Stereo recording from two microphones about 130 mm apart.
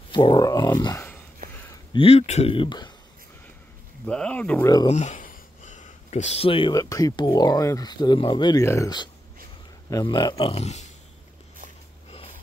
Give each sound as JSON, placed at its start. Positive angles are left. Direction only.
{"t": 0.1, "sound": "speech", "side_deg": 35}
{"t": 2.0, "sound": "speech", "side_deg": 50}
{"t": 2.5, "sound": "speech", "side_deg": 40}
{"t": 4.0, "sound": "speech", "side_deg": 10}
{"t": 4.8, "sound": "a sound", "side_deg": 65}
{"t": 6.7, "sound": "speech", "side_deg": 25}
{"t": 10.3, "sound": "speech", "side_deg": 50}